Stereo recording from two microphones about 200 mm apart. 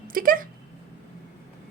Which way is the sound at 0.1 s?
45° right (ahead or behind).